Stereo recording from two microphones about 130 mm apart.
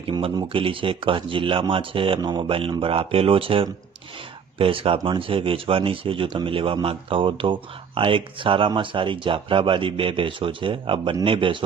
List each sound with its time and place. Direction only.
0.1 s speech: 40° right (ahead or behind)